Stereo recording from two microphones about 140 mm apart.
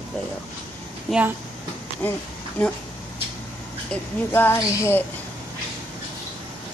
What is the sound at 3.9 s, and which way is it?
Speech, 15° left (ahead or behind).